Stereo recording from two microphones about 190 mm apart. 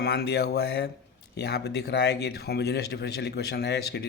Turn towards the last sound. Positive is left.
turn(degrees=60)  # may be behind; listen again after turning